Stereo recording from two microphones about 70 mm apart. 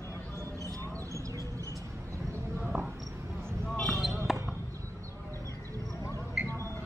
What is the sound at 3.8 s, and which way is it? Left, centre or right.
Basketball bounce, centre.